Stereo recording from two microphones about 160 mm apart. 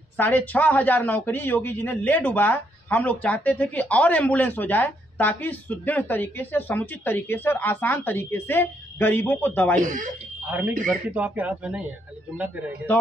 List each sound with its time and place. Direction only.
0.2 s a man's voice: 10° left (ahead or behind)
9.8 s speech: 55° right (ahead or behind)
10.4 s speech: 10° right (ahead or behind)